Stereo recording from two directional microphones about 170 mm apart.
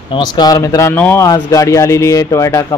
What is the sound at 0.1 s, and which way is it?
Speech, 25° left (ahead or behind).